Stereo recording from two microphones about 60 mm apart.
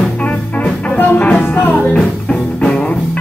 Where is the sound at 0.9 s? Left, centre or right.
Left.